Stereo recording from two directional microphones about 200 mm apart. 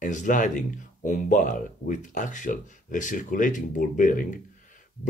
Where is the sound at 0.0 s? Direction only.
40° left (ahead or behind).